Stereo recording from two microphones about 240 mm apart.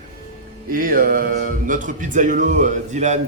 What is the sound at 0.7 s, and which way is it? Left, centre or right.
Speech, right.